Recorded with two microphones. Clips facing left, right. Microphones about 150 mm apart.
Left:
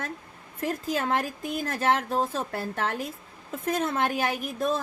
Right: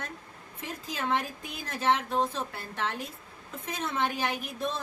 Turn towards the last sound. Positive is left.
turn(degrees=50)  # may be behind; listen again after turning